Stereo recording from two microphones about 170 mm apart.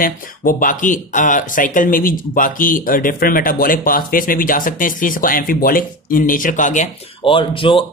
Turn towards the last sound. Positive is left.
turn(degrees=30)  # may be behind; listen again after turning